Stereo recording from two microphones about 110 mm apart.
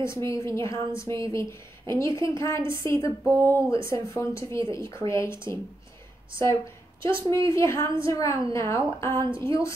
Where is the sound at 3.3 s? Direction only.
30° right (ahead or behind).